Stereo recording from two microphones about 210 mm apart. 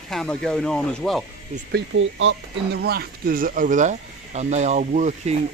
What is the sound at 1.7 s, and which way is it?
Speech, 65° right (ahead or behind).